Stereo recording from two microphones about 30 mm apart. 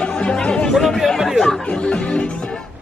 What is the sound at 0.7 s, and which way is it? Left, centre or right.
Chatter, centre.